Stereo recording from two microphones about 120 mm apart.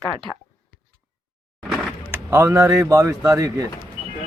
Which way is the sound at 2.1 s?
20° right (ahead or behind).